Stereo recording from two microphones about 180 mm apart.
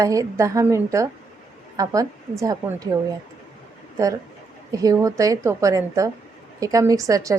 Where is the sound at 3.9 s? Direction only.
20° right (ahead or behind).